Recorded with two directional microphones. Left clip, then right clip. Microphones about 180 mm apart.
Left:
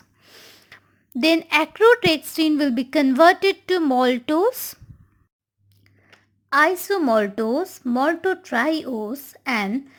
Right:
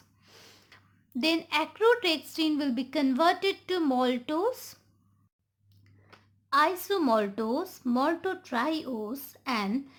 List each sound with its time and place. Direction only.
0.2 s snort: 20° left (ahead or behind)
1.2 s a woman's voice: 30° left (ahead or behind)
6.5 s speech: 30° left (ahead or behind)